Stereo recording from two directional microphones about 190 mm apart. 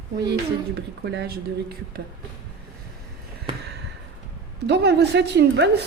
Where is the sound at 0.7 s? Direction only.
60° right (ahead or behind).